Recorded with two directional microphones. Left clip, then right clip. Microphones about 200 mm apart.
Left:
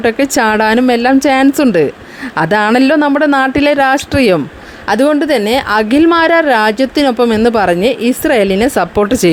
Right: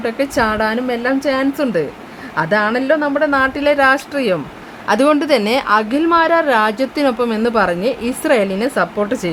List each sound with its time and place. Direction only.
0.0 s speech: 35° left (ahead or behind)
4.9 s a woman's voice: 15° left (ahead or behind); by 9.3 s 35° left (ahead or behind)